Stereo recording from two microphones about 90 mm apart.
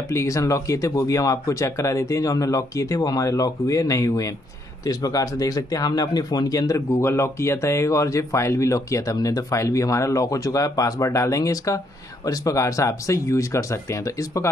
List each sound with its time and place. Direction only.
0.1 s speech: 35° left (ahead or behind)